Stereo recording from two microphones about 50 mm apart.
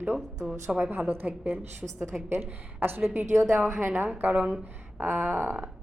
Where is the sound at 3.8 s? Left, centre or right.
Right.